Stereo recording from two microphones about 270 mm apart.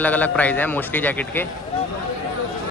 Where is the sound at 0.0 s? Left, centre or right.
Centre.